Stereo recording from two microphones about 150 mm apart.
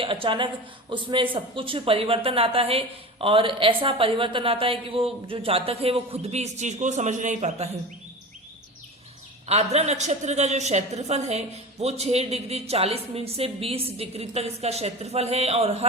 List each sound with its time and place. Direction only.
0.0 s speech: 35° right (ahead or behind)
9.5 s a woman's voice: 45° right (ahead or behind)